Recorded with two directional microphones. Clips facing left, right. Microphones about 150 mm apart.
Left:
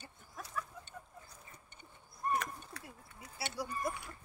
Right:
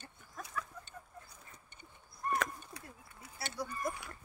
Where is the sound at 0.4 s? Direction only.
5° left (ahead or behind).